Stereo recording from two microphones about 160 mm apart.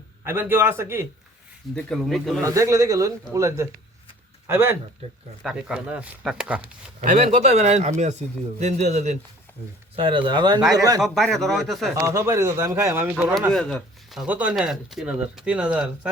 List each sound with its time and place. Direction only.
0.3 s speech: 15° right (ahead or behind)
1.7 s speech: centre (ahead or behind)
2.4 s speech: 20° right (ahead or behind)
5.0 s speech: 40° right (ahead or behind)
5.4 s speech: 5° right (ahead or behind)
7.0 s speech: 45° right (ahead or behind)
9.9 s speech: 30° right (ahead or behind)
11.0 s speech: centre (ahead or behind)
11.9 s speech: 20° right (ahead or behind)
13.5 s speech: 5° left (ahead or behind)